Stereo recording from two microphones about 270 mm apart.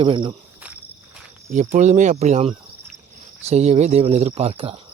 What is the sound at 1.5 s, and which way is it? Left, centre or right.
Speech, right.